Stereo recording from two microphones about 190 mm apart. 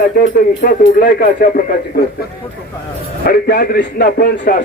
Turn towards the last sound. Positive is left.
turn(degrees=50)  # may be behind; listen again after turning